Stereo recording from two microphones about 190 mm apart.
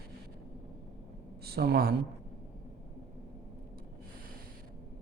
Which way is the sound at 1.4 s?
55° right (ahead or behind).